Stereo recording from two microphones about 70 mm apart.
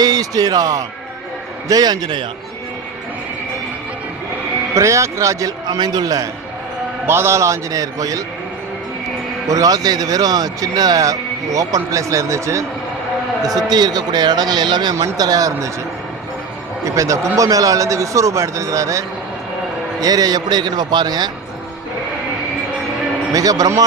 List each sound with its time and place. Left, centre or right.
0.0 s a man's voice: right
4.7 s a man's voice: right
5.6 s a man's voice: right
7.0 s a man's voice: right
9.5 s speech: right
13.4 s a man's voice: right
14.9 s speech: right
16.8 s a man's voice: right
20.0 s a man's voice: right
23.3 s speech: right